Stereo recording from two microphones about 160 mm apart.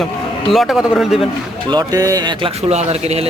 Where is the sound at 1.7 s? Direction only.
25° right (ahead or behind).